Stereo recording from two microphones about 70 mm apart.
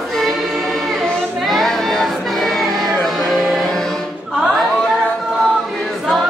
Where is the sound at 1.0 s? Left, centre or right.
Centre.